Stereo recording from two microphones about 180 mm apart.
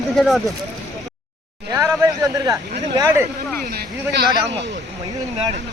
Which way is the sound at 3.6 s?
60° right (ahead or behind).